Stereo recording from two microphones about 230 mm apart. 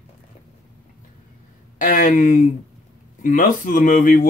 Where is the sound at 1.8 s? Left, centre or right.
Left.